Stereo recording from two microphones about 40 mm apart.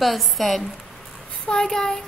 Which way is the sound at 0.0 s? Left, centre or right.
Centre.